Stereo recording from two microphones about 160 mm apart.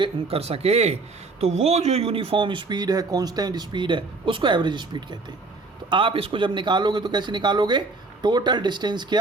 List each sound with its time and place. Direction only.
0.0 s a man's voice: 35° right (ahead or behind)